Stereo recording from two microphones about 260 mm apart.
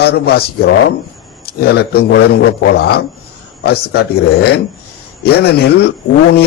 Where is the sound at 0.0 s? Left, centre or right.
Left.